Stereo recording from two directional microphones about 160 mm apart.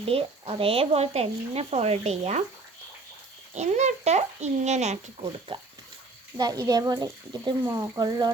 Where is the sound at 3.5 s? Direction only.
45° right (ahead or behind).